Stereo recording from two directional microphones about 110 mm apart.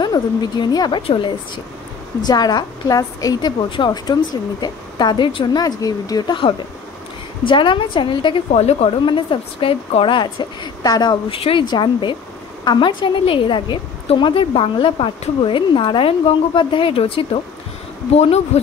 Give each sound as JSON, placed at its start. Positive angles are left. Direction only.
{"t": 0.0, "sound": "a woman's voice", "side_deg": 40}
{"t": 1.0, "sound": "speech", "side_deg": 50}
{"t": 2.2, "sound": "a woman's voice", "side_deg": 40}
{"t": 8.5, "sound": "speech", "side_deg": 75}
{"t": 9.0, "sound": "speech", "side_deg": 50}
{"t": 11.2, "sound": "speech", "side_deg": 55}
{"t": 18.1, "sound": "speech", "side_deg": 75}